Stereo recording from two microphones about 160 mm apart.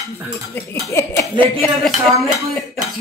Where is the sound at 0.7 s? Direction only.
20° left (ahead or behind).